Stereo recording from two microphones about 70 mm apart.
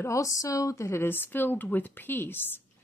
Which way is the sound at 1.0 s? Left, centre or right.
Left.